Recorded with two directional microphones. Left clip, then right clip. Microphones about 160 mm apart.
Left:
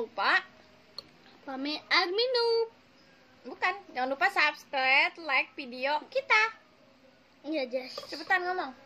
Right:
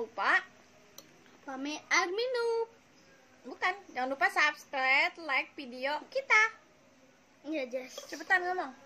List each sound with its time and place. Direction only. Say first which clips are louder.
0.1 s speech: left 2 dB; 5° right (ahead or behind)
1.4 s a child's voice: left 4 dB; 15° left (ahead or behind)
3.4 s a woman's voice: left 2 dB; 5° right (ahead or behind)
7.5 s a child's voice: left 4 dB; 15° left (ahead or behind)
8.1 s a woman's voice: left 1 dB; 10° right (ahead or behind)